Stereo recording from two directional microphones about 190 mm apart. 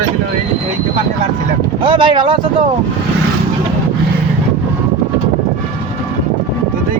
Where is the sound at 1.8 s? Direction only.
25° right (ahead or behind).